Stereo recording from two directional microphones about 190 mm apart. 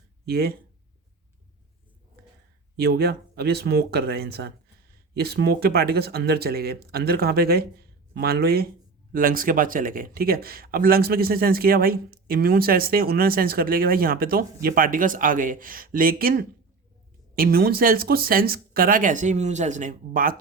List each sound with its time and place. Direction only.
0.3 s speech: 55° right (ahead or behind)
2.7 s speech: 55° right (ahead or behind)